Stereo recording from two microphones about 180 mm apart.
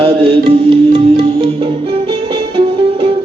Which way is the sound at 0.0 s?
30° right (ahead or behind).